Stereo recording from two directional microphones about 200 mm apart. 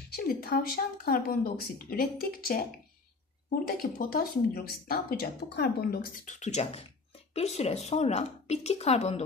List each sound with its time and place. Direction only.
0.1 s speech: 50° left (ahead or behind); by 9.2 s 35° left (ahead or behind)